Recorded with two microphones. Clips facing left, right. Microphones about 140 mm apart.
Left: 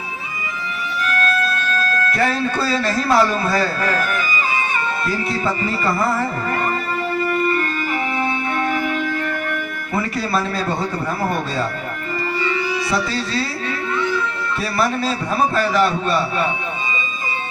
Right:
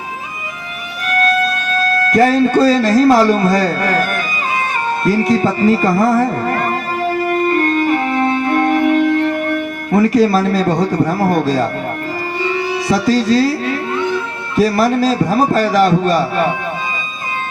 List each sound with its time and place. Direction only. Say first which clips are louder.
1.8 s speech: right 9 dB; 30° right (ahead or behind)
5.0 s speech: right 11 dB; 35° right (ahead or behind)
7.1 s music: right 4 dB; 50° right (ahead or behind)
8.9 s music: right 10 dB; 30° right (ahead or behind)
9.9 s speech: right 10 dB; 40° right (ahead or behind)
12.9 s speech: right 14 dB; 35° right (ahead or behind)
14.8 s speech: right 7 dB; 40° right (ahead or behind)